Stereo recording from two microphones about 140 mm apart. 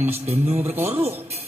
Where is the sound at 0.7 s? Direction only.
15° right (ahead or behind).